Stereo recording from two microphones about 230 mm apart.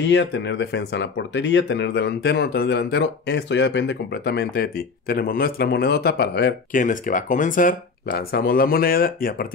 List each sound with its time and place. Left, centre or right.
0.1 s speech: left